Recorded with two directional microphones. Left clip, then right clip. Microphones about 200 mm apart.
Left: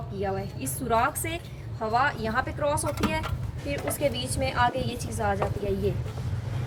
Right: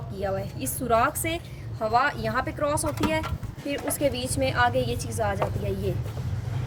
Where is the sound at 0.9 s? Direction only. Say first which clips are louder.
Right 2 dB; 65° right (ahead or behind).